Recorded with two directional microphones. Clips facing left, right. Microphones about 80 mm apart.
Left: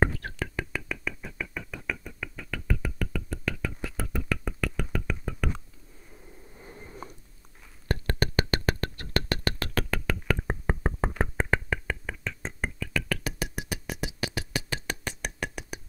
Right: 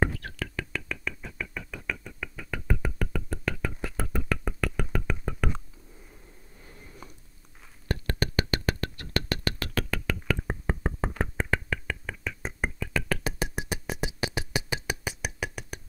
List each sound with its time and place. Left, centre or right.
0.0 s whispering: left
0.7 s a sound: centre
2.5 s music: right
6.5 s a sound: left
7.9 s music: left
12.1 s music: centre